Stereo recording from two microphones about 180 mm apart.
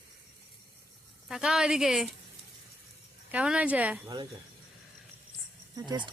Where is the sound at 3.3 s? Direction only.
5° right (ahead or behind).